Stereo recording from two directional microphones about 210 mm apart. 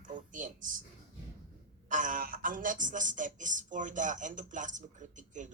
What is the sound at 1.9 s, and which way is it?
Speech, 40° right (ahead or behind).